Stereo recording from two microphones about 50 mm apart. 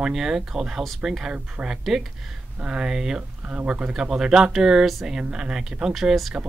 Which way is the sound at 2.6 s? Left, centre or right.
Right.